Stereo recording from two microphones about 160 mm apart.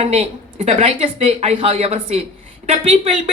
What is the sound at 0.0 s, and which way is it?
Speech, 35° right (ahead or behind).